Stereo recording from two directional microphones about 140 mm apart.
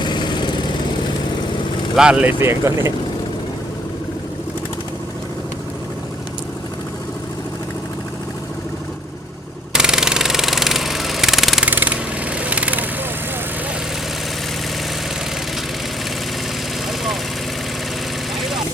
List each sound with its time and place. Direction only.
0.0 s lawn mower: 30° left (ahead or behind)
2.0 s speech: 5° right (ahead or behind)
9.7 s engine: 5° right (ahead or behind)
11.7 s vehicle: 10° right (ahead or behind)